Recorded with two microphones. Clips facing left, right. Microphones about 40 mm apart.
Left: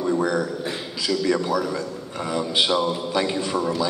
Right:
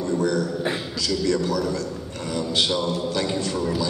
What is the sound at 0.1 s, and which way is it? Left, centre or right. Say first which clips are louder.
A man's voice: right 1 dB; centre.